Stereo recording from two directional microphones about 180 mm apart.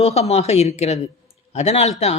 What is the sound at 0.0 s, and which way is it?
A woman's voice, 35° left (ahead or behind).